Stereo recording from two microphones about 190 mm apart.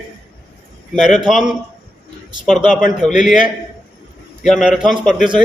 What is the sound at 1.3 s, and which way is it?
Speech, 5° right (ahead or behind).